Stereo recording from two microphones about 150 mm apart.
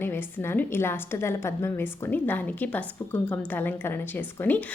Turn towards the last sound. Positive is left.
turn(degrees=10)  # may be behind; listen again after turning